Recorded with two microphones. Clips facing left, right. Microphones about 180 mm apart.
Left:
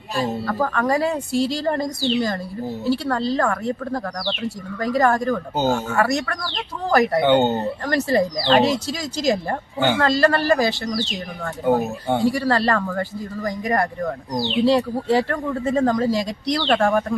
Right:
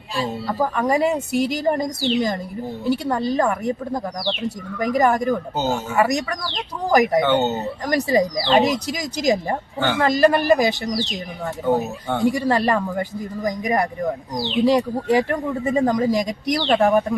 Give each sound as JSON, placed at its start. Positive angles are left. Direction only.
{"t": 0.4, "sound": "speech", "side_deg": -15}
{"t": 7.3, "sound": "speech", "side_deg": 15}
{"t": 7.5, "sound": "speech", "side_deg": -15}
{"t": 11.6, "sound": "speech", "side_deg": 10}
{"t": 12.2, "sound": "speech", "side_deg": -20}